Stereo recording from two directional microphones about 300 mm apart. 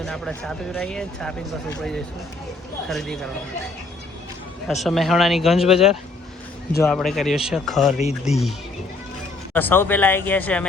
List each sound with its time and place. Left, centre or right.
0.0 s speech: centre
4.7 s speech: centre
7.9 s speech: left
9.5 s speech: centre